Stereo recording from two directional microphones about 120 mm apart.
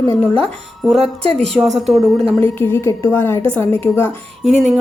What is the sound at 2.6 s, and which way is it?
A woman's voice, 20° left (ahead or behind).